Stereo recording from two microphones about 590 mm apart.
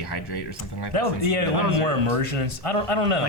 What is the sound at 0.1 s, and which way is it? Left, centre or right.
Speech, left.